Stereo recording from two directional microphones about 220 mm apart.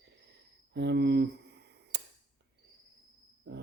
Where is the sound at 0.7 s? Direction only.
50° right (ahead or behind).